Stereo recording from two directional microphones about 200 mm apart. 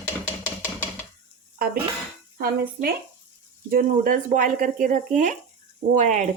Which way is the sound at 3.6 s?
45° right (ahead or behind).